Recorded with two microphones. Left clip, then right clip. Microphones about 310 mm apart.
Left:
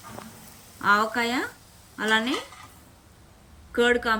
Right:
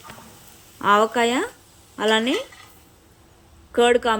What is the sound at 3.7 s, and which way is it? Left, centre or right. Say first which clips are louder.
Speech: right 4 dB; centre.